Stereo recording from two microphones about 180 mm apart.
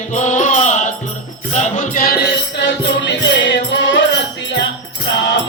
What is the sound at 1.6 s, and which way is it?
Music, 45° left (ahead or behind).